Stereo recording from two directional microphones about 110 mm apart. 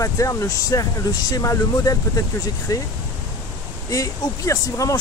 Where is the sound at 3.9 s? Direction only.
30° left (ahead or behind).